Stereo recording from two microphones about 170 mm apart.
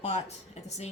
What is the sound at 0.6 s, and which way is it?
Speech, 40° left (ahead or behind).